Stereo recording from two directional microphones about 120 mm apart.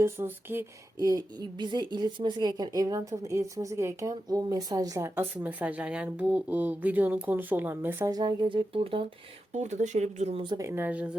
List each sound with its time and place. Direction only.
0.0 s a woman's voice: 20° right (ahead or behind)
0.9 s a woman's voice: 30° right (ahead or behind)
8.1 s speech: 35° right (ahead or behind)
8.7 s speech: 50° right (ahead or behind)
9.5 s speech: 75° right (ahead or behind)
10.6 s speech: 20° right (ahead or behind)